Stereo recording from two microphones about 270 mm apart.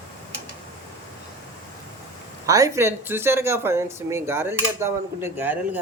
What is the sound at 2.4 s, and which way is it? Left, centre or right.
Speech, centre.